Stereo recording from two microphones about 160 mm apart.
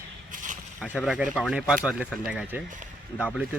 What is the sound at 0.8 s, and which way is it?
Speech, 5° right (ahead or behind).